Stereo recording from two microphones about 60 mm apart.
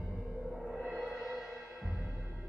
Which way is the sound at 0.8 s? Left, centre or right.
Centre.